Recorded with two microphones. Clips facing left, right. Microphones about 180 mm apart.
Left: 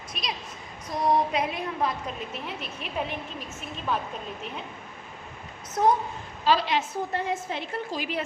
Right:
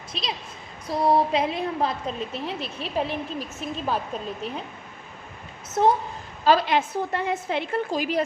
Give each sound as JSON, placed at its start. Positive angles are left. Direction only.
{"t": 0.1, "sound": "a woman's voice", "side_deg": -25}
{"t": 5.8, "sound": "a woman's voice", "side_deg": -30}
{"t": 6.4, "sound": "a woman's voice", "side_deg": -50}
{"t": 7.9, "sound": "a woman's voice", "side_deg": -40}